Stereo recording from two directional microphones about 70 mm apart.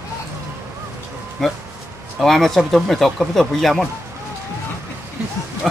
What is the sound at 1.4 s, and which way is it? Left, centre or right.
Speech, centre.